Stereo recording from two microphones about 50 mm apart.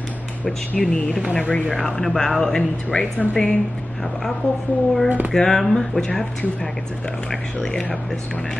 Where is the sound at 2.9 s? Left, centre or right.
Left.